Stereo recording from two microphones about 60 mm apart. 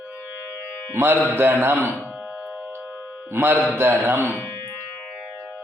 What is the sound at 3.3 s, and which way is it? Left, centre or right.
Music, right.